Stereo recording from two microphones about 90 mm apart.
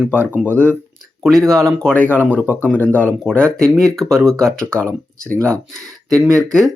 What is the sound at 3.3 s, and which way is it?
Speech, 10° left (ahead or behind).